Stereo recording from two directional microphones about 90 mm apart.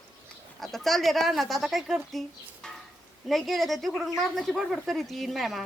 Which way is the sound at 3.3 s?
Centre (ahead or behind).